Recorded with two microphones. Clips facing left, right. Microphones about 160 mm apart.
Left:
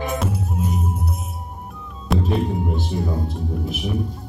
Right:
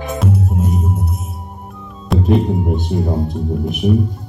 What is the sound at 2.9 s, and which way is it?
Speech, 60° right (ahead or behind).